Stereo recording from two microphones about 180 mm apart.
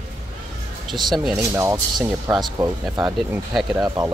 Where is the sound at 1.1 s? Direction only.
5° right (ahead or behind).